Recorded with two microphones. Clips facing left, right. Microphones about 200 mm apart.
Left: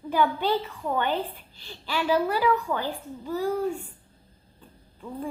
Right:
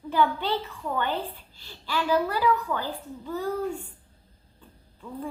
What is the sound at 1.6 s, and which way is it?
A woman's voice, 15° left (ahead or behind).